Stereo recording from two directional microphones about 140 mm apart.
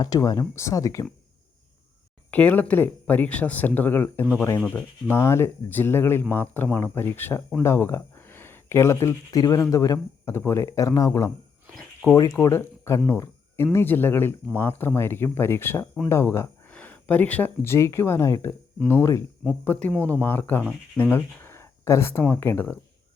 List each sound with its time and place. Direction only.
0.0 s speech: 25° left (ahead or behind)
2.3 s speech: 10° left (ahead or behind)
13.1 s a sound: 20° left (ahead or behind)
13.7 s speech: 15° left (ahead or behind)